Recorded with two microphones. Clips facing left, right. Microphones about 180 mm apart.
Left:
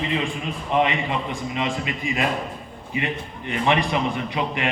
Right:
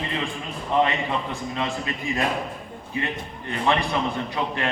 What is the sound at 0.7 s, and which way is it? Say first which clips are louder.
A man's voice: even; 15° left (ahead or behind).